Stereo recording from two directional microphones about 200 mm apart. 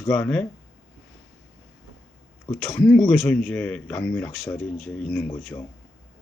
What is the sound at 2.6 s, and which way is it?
Speech, 5° left (ahead or behind).